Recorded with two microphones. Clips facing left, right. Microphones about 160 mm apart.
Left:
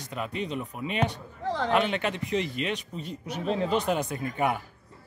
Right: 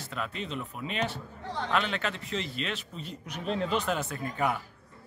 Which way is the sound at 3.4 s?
40° left (ahead or behind).